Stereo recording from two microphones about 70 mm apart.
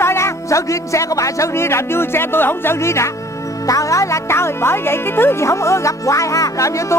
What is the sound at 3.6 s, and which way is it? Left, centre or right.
Speech, left.